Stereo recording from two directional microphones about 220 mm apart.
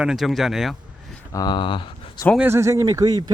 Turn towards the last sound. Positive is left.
turn(degrees=-15)  # may be behind; listen again after turning